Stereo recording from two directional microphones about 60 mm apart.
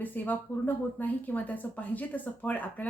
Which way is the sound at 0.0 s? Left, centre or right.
Left.